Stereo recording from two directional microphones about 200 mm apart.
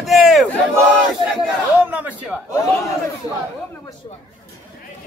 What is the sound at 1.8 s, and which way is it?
Speech, 10° right (ahead or behind).